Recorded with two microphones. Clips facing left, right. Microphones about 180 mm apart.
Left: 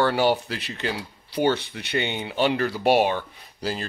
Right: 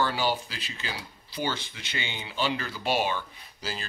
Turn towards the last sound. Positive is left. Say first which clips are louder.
# left 8 dB
turn(degrees=60)  # may be behind; listen again after turning